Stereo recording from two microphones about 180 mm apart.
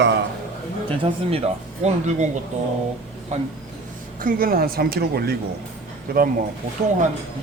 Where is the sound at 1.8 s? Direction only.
40° right (ahead or behind).